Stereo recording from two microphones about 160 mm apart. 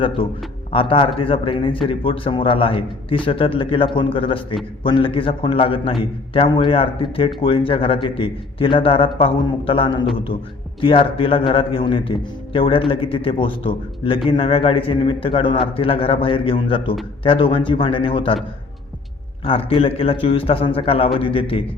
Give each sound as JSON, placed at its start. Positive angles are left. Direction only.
{"t": 0.2, "sound": "speech", "side_deg": 35}
{"t": 19.5, "sound": "speech", "side_deg": 35}